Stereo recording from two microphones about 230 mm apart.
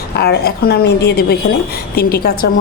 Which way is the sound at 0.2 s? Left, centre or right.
Left.